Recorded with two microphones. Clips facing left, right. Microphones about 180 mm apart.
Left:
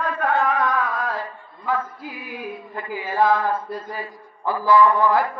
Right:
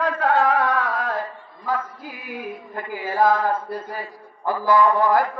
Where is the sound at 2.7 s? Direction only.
45° right (ahead or behind).